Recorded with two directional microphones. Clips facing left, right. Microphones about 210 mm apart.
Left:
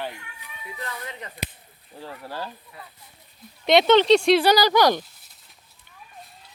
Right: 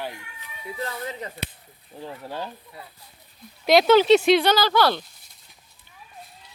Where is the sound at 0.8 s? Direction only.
30° right (ahead or behind).